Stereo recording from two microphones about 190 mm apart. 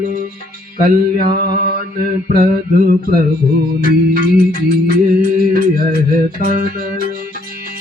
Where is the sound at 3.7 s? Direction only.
50° right (ahead or behind).